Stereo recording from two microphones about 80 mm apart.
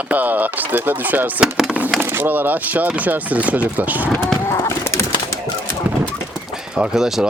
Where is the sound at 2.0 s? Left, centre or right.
Right.